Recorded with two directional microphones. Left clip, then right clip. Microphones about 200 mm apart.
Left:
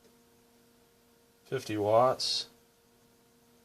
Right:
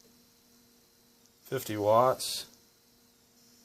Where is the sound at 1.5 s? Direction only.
40° right (ahead or behind).